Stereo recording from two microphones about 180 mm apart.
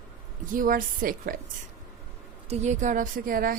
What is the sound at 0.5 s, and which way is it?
Speech, 50° right (ahead or behind).